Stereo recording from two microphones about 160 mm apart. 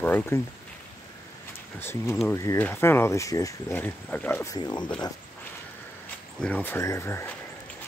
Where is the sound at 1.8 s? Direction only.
15° left (ahead or behind).